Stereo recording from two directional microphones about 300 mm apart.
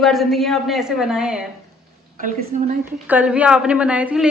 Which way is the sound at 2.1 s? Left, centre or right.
Right.